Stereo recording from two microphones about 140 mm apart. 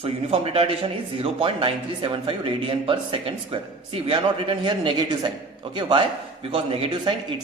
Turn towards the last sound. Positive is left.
turn(degrees=-40)  # may be behind; listen again after turning